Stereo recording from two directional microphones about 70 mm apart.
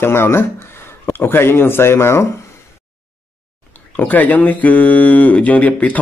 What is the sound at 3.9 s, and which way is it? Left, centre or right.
Speech, left.